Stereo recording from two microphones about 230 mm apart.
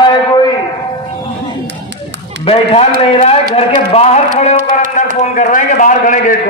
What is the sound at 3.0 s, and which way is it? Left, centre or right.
A man's voice, left.